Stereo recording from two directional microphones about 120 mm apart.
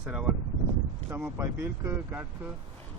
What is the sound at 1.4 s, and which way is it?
Speech, 20° right (ahead or behind).